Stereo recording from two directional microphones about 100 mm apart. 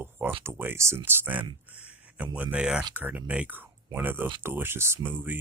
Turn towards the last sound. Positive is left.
turn(degrees=-20)  # may be behind; listen again after turning